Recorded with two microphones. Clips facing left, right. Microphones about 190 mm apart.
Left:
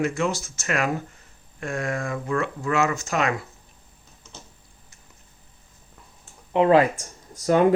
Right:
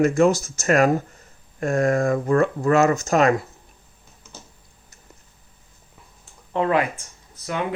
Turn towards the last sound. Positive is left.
turn(degrees=40)  # may be behind; listen again after turning